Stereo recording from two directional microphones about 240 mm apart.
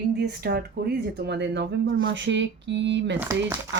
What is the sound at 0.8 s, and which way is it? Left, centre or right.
Speech, right.